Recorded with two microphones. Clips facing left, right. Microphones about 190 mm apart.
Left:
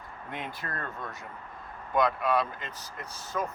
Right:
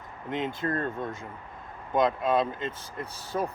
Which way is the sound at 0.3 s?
20° right (ahead or behind).